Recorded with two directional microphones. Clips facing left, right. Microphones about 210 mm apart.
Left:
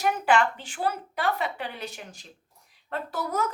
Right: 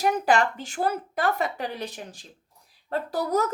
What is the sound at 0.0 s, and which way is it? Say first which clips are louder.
A woman's voice: right 1 dB; 40° right (ahead or behind).